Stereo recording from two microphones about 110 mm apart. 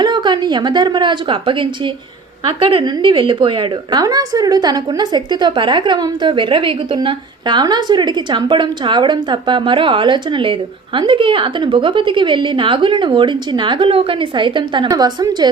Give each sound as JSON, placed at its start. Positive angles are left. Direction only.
{"t": 0.0, "sound": "a woman's voice", "side_deg": -45}
{"t": 4.0, "sound": "a woman's voice", "side_deg": -35}
{"t": 14.8, "sound": "a woman's voice", "side_deg": -40}